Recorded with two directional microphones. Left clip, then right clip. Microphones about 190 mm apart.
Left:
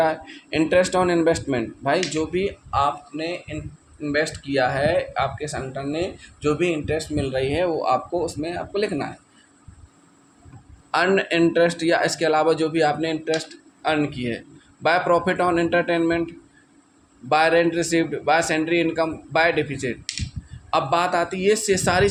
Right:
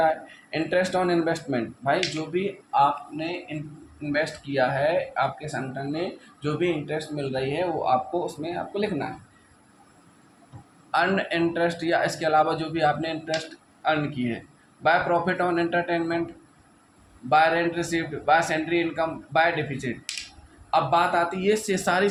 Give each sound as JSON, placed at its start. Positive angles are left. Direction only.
{"t": 0.0, "sound": "speech", "side_deg": 45}
{"t": 10.9, "sound": "speech", "side_deg": 50}
{"t": 17.2, "sound": "speech", "side_deg": 50}